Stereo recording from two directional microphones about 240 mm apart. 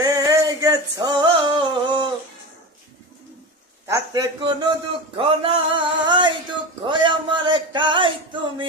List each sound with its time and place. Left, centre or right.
0.0 s male singing: centre
3.8 s a man's voice: centre
5.1 s a sound: right